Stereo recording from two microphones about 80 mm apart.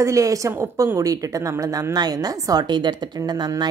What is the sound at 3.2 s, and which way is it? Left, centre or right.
Speech, right.